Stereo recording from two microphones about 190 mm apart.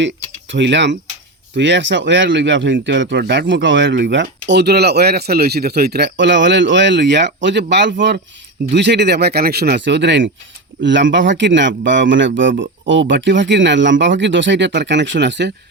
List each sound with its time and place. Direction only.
0.5 s speech: 65° right (ahead or behind)